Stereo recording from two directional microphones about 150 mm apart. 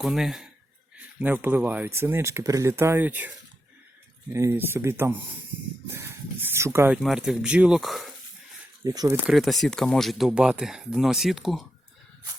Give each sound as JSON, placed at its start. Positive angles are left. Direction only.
{"t": 0.0, "sound": "speech", "side_deg": 0}
{"t": 6.9, "sound": "speech", "side_deg": -5}
{"t": 8.8, "sound": "speech", "side_deg": -25}
{"t": 9.3, "sound": "speech", "side_deg": 0}